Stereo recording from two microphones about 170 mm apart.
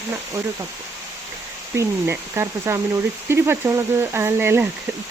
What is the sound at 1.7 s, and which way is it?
Speech, 15° right (ahead or behind).